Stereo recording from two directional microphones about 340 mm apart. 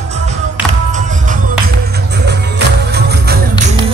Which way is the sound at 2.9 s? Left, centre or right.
Right.